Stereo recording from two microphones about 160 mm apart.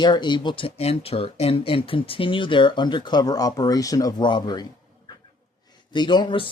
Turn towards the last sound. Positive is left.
turn(degrees=30)  # may be behind; listen again after turning